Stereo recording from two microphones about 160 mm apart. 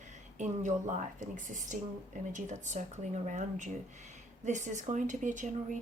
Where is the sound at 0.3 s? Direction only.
50° right (ahead or behind).